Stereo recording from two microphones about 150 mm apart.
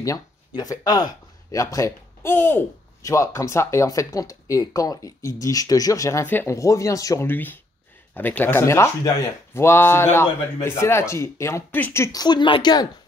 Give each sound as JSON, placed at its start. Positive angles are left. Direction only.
{"t": 0.6, "sound": "speech", "side_deg": 25}